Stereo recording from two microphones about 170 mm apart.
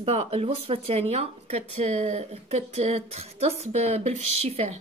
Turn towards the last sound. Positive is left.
turn(degrees=-40)  # may be behind; listen again after turning